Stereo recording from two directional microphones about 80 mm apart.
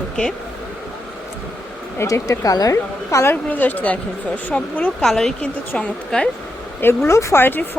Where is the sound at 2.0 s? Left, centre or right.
Left.